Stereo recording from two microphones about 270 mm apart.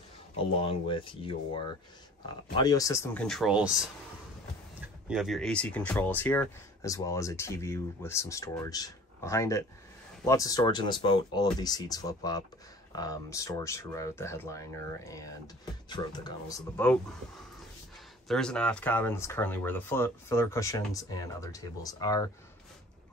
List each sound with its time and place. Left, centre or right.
0.6 s speech: centre
4.8 s speech: centre
18.3 s speech: centre